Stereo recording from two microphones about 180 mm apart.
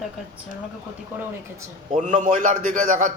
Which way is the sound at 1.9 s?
45° right (ahead or behind).